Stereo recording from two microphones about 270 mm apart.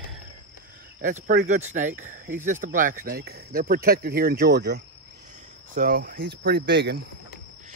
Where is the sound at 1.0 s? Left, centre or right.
Right.